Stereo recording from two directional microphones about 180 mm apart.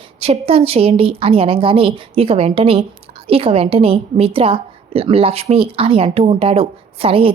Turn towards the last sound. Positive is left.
turn(degrees=-30)  # may be behind; listen again after turning